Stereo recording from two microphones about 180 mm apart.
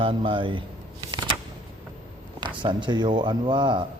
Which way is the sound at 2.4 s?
25° right (ahead or behind).